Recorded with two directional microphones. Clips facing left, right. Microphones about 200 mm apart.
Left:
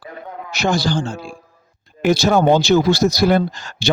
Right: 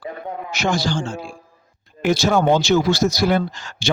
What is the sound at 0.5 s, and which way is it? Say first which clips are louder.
Speech: left 3 dB; 35° left (ahead or behind).